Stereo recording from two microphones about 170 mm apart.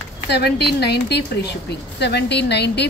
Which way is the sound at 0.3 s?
80° left.